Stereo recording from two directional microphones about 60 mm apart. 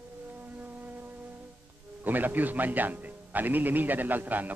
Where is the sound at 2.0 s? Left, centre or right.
Right.